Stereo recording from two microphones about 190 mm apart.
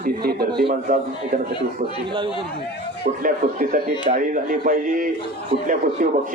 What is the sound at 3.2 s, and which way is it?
A man's voice, 45° right (ahead or behind).